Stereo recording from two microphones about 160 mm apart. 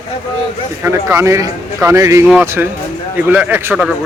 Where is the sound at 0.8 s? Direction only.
15° right (ahead or behind).